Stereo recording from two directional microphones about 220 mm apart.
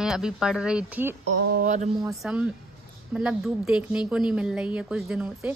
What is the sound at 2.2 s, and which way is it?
A woman's voice, centre (ahead or behind).